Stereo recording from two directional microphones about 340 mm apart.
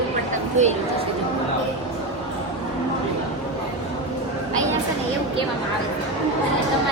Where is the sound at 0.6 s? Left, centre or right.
Right.